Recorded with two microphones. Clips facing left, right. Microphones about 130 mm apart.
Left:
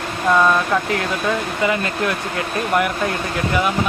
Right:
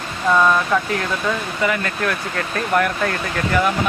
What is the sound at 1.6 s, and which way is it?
Speech, 25° left (ahead or behind).